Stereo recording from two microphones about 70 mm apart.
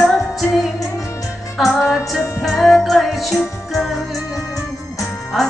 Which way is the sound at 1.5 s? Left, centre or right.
Centre.